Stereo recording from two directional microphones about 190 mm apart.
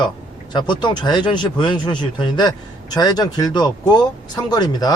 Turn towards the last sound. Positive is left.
turn(degrees=20)  # may be behind; listen again after turning